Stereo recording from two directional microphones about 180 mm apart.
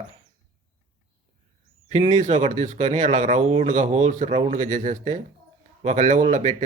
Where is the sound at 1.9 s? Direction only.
40° right (ahead or behind).